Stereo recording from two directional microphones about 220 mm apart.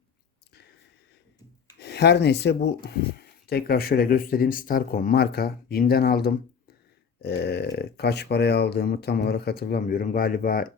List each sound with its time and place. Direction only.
1.8 s speech: 50° left (ahead or behind)